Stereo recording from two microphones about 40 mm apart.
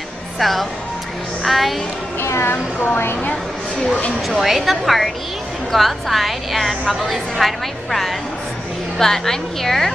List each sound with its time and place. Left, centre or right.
0.4 s a woman's voice: centre
2.1 s speech: left
3.2 s a woman's voice: left
4.4 s a woman's voice: centre